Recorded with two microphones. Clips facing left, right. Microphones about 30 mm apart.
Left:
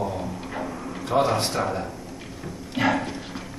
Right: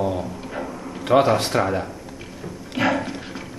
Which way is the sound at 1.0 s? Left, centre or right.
Right.